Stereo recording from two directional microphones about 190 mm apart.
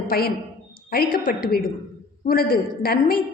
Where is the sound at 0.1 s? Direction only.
55° left (ahead or behind).